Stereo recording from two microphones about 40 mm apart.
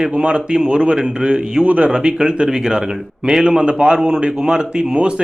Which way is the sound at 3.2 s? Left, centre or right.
Right.